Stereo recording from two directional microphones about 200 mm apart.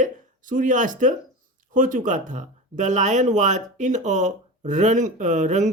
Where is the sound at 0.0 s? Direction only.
40° right (ahead or behind).